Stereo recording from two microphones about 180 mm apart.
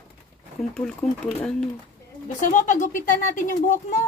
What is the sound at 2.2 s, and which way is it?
Speech, 45° left (ahead or behind).